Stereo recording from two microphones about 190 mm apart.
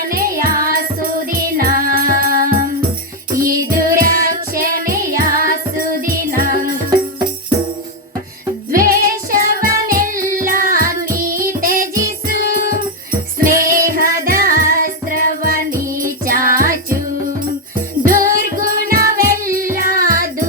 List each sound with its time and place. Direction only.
0.0 s music: 50° right (ahead or behind)
8.7 s music: 50° right (ahead or behind)
18.0 s music: 45° right (ahead or behind)